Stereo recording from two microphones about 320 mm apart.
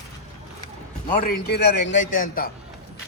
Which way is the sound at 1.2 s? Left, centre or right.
Left.